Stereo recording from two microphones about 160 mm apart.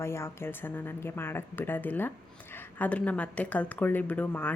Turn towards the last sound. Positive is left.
turn(degrees=10)  # may be behind; listen again after turning